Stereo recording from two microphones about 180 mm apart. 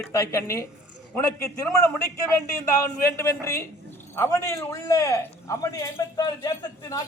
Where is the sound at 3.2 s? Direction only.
15° left (ahead or behind).